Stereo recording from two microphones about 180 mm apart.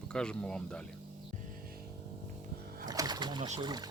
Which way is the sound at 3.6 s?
25° right (ahead or behind).